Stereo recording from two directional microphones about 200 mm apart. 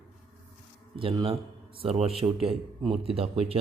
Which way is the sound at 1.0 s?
25° right (ahead or behind).